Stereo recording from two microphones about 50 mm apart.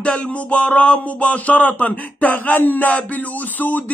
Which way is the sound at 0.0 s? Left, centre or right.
Left.